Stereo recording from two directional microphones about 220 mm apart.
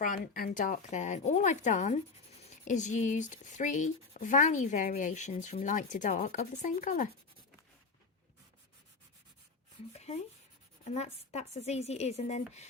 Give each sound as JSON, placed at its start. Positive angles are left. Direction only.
{"t": 0.0, "sound": "speech", "side_deg": 40}
{"t": 9.9, "sound": "a woman's voice", "side_deg": 30}